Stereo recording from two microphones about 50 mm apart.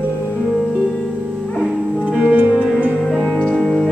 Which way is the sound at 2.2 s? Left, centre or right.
Right.